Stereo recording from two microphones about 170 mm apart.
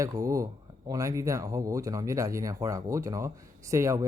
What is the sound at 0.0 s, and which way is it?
Speech, 20° right (ahead or behind).